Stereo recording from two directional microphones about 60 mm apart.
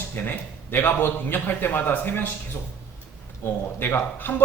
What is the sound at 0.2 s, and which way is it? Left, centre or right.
Speech, left.